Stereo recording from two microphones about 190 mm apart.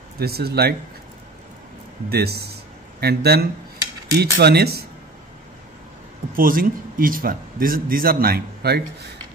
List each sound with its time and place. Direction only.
0.2 s speech: 55° right (ahead or behind)
2.0 s speech: 55° right (ahead or behind)
6.3 s a man's voice: 50° right (ahead or behind)